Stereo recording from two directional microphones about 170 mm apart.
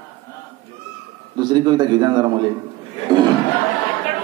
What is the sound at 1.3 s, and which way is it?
Speech, 25° right (ahead or behind).